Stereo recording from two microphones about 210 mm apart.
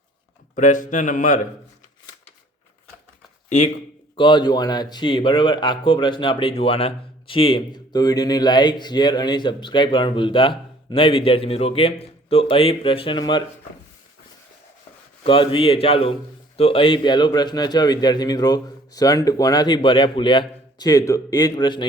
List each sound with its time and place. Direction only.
0.5 s speech: 35° left (ahead or behind)
3.5 s speech: 35° left (ahead or behind)
4.2 s speech: 20° left (ahead or behind)
15.2 s speech: 25° left (ahead or behind)